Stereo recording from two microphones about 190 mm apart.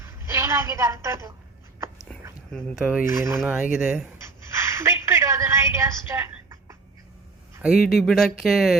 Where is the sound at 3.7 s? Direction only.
5° right (ahead or behind).